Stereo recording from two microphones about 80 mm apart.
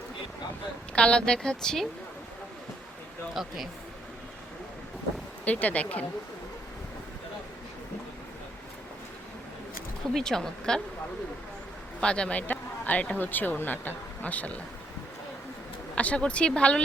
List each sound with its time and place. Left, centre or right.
0.9 s a woman's voice: centre
3.3 s speech: centre
5.5 s speech: centre
10.2 s a woman's voice: centre
11.9 s speech: centre
16.0 s a woman's voice: centre